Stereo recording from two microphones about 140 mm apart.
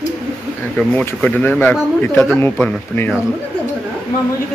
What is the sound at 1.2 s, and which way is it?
A man's voice, 10° left (ahead or behind).